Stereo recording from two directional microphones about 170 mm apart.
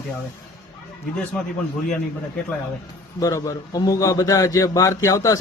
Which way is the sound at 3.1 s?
20° left (ahead or behind).